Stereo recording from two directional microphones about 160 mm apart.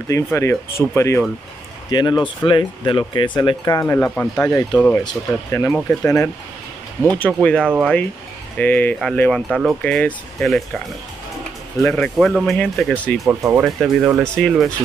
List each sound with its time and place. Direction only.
0.1 s speech: 15° left (ahead or behind)
3.8 s speech: 10° left (ahead or behind)
11.8 s speech: 5° left (ahead or behind)
13.3 s speech: 20° right (ahead or behind)
13.6 s speech: centre (ahead or behind)